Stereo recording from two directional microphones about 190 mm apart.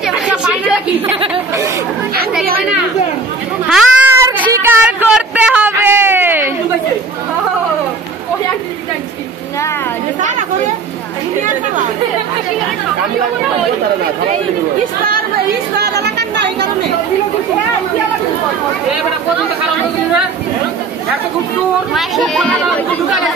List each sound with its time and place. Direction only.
0.0 s chatter: 5° right (ahead or behind)
3.6 s cat: 10° right (ahead or behind)
4.8 s a sound: 5° right (ahead or behind)
15.8 s chatter: 60° right (ahead or behind)
21.9 s speech: centre (ahead or behind)